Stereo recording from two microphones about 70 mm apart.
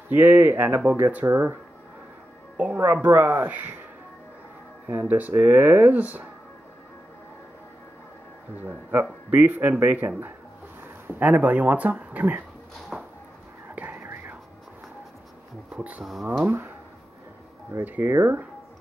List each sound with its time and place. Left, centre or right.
0.1 s a man's voice: right
1.2 s speech: right
2.5 s music: right
3.1 s a man's voice: right
4.8 s a man's voice: right
9.3 s a man's voice: right
12.9 s a sound: centre
13.7 s whispering: right
15.7 s speech: right
16.0 s speech: centre
16.4 s a man's voice: right
17.8 s a man's voice: right
18.1 s speech: right